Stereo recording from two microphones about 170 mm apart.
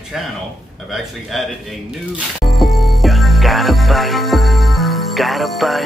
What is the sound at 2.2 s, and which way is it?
Music, centre (ahead or behind).